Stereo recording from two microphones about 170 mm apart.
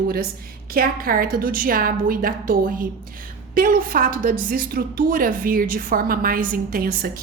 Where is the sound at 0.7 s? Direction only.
55° right (ahead or behind).